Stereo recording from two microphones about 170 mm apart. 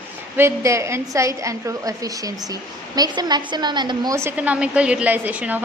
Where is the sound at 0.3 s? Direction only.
15° right (ahead or behind).